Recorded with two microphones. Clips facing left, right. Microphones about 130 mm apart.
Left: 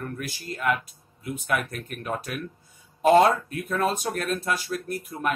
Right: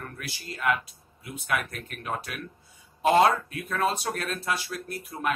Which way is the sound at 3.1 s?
50° left (ahead or behind).